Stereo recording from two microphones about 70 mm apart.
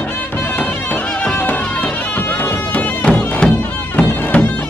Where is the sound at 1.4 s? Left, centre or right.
Left.